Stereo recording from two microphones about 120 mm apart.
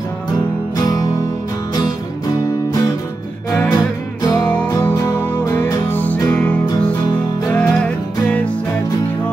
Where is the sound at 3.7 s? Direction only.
30° left (ahead or behind).